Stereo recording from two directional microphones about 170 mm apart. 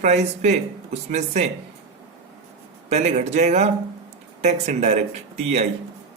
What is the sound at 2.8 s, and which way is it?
Speech, 40° right (ahead or behind).